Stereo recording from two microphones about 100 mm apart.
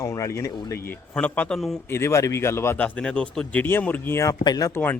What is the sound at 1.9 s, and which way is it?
Speech, 30° left (ahead or behind).